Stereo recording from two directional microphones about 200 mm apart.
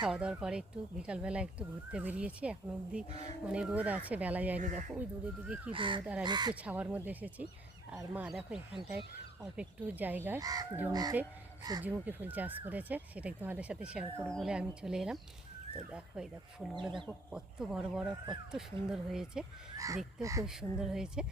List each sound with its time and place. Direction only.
0.0 s speech: 5° right (ahead or behind)
4.6 s speech: 40° right (ahead or behind)
4.9 s speech: 5° right (ahead or behind)
5.7 s speech: 25° right (ahead or behind)
6.5 s speech: 5° right (ahead or behind)
19.7 s speech: 15° right (ahead or behind)
20.5 s speech: 5° right (ahead or behind)